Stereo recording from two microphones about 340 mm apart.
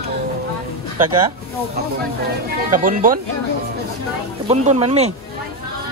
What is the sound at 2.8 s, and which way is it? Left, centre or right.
Speech, right.